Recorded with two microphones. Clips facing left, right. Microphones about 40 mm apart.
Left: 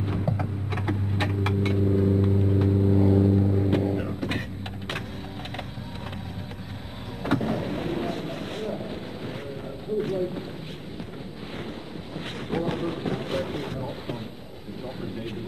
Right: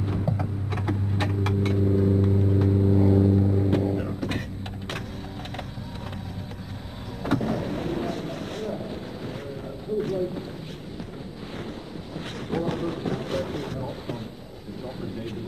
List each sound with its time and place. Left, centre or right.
0.7 s a sound: left
1.9 s vehicle: centre
2.2 s vehicle: left
2.7 s vehicle: centre
3.7 s a sound: left
7.2 s vehicle: left
9.9 s run: left
12.2 s boat: left
13.7 s vehicle: left